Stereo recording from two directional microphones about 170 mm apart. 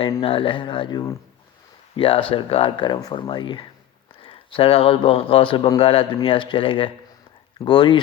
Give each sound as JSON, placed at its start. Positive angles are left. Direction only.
{"t": 0.2, "sound": "speech", "side_deg": 30}
{"t": 2.0, "sound": "speech", "side_deg": 30}